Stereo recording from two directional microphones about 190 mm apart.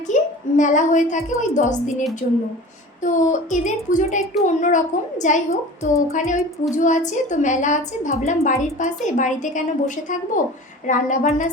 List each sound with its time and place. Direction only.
0.1 s a woman's voice: 40° left (ahead or behind)